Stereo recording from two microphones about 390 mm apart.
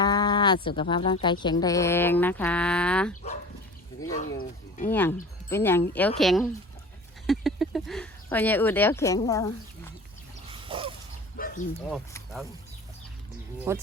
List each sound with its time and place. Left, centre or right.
0.0 s speech: centre
4.2 s speech: left
4.9 s speech: centre
10.5 s a sound: centre
11.3 s bow-wow: left
11.9 s speech: centre
13.7 s speech: centre